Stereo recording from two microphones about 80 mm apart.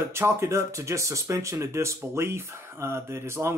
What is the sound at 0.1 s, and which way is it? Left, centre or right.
Speech, right.